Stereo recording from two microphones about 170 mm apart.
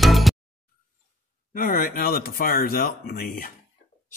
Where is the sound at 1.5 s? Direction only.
55° left (ahead or behind).